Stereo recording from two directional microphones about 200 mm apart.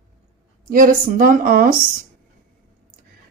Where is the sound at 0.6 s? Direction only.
45° right (ahead or behind).